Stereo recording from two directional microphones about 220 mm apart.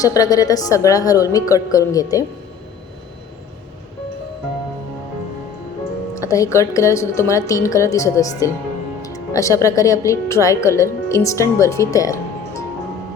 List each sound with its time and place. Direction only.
0.0 s a woman's voice: 15° left (ahead or behind)
6.1 s a woman's voice: 15° left (ahead or behind)